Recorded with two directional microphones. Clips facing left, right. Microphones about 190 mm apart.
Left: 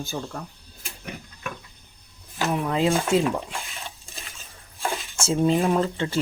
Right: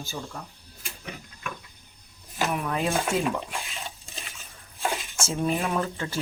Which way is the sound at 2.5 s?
25° left (ahead or behind).